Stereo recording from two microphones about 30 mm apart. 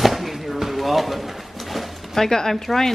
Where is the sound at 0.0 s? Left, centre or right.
Centre.